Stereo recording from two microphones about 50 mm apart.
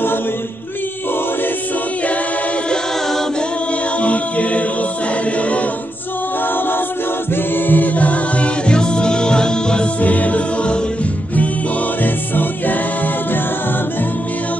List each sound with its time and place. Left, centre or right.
4.0 s music: left
7.5 s music: left; by 9.8 s centre
9.9 s music: left
12.0 s music: left